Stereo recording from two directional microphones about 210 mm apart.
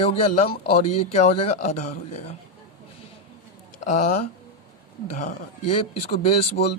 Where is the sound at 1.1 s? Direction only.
30° left (ahead or behind).